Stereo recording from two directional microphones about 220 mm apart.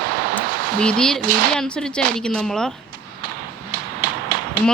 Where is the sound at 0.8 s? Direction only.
5° left (ahead or behind).